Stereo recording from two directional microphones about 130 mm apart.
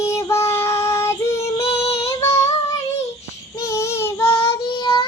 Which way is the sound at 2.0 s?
25° left (ahead or behind).